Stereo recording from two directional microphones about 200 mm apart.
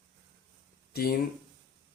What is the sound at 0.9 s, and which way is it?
Speech, 50° left (ahead or behind).